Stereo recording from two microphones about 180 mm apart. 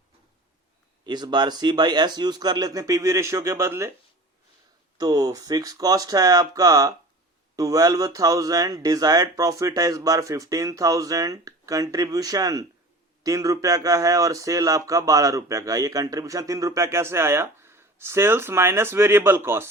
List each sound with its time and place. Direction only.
1.0 s speech: 25° right (ahead or behind)
4.9 s speech: 20° right (ahead or behind)